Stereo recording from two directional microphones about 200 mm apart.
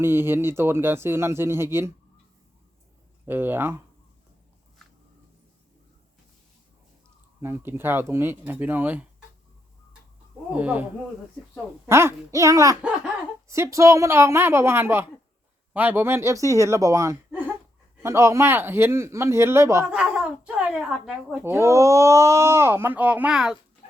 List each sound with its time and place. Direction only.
0.0 s speech: 10° right (ahead or behind)
3.2 s speech: 10° right (ahead or behind)
7.4 s speech: 10° right (ahead or behind)
10.5 s speech: 5° right (ahead or behind)
11.9 s speech: 15° right (ahead or behind)